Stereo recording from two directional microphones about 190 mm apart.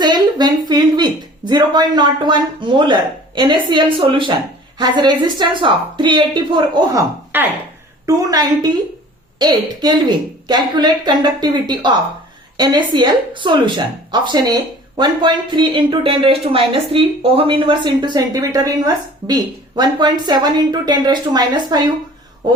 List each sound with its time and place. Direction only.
0.0 s speech: 20° right (ahead or behind)
7.3 s speech: 10° right (ahead or behind)